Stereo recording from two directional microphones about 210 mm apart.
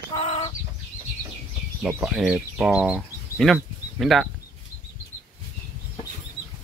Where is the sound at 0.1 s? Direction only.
25° left (ahead or behind).